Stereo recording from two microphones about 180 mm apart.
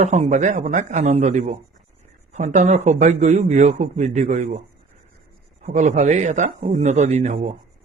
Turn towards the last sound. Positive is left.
turn(degrees=-40)  # may be behind; listen again after turning